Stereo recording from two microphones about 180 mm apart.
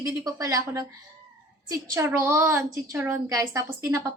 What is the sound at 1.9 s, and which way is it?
A woman's voice, 15° right (ahead or behind).